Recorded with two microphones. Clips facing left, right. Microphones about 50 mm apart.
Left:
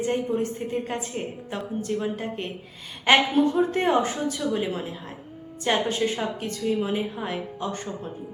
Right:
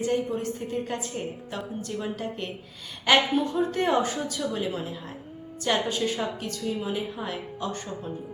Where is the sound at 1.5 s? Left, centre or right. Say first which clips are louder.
Left 4 dB; left.